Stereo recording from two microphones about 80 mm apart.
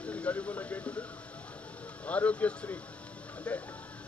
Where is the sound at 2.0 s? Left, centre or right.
Centre.